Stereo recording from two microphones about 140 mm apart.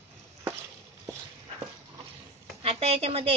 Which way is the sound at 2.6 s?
45° right (ahead or behind).